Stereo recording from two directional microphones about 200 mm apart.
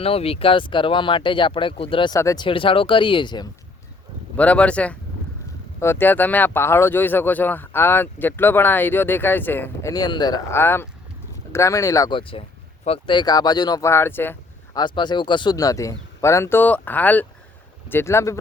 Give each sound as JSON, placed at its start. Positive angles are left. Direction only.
{"t": 0.0, "sound": "speech", "side_deg": 30}
{"t": 4.4, "sound": "speech", "side_deg": 5}